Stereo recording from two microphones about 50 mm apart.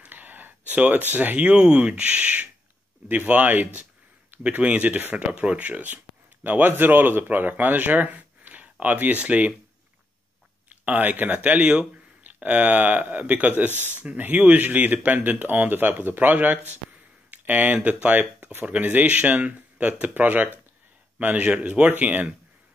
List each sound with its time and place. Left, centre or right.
0.0 s speech: right
10.9 s speech: right